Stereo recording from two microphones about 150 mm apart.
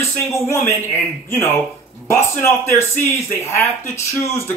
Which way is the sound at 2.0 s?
20° left (ahead or behind).